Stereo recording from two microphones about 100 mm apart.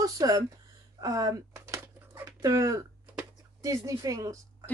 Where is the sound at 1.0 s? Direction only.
35° right (ahead or behind).